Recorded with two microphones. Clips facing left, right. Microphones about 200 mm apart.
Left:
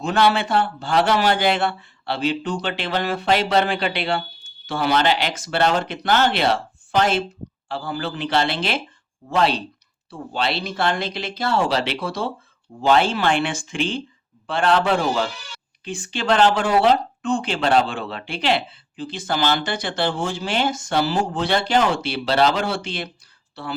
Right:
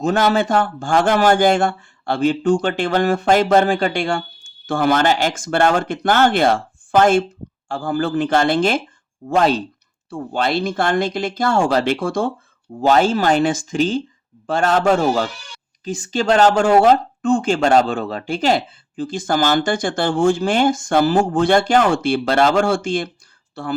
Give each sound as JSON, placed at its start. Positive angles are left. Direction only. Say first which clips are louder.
{"t": 0.0, "sound": "speech", "louder": "right 3 dB", "side_deg": -45}